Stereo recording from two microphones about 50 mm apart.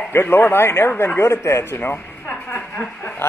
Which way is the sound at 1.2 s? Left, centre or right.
Left.